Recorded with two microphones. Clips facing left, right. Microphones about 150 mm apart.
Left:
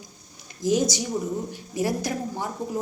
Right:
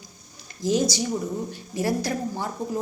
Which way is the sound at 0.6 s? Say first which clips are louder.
Even; 15° left (ahead or behind).